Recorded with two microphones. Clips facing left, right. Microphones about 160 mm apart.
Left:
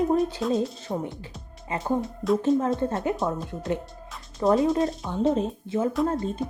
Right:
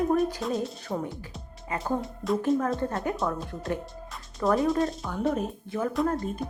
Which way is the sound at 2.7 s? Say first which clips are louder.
Left 3 dB; 20° left (ahead or behind).